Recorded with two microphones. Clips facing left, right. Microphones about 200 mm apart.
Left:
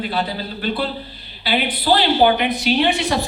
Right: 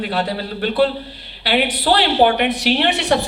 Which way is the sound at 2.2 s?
60° right (ahead or behind).